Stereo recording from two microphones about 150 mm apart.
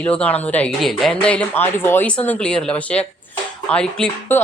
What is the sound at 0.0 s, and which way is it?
Speech, 10° left (ahead or behind).